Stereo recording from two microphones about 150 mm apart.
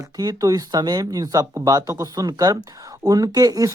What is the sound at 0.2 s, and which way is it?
Speech, 25° right (ahead or behind).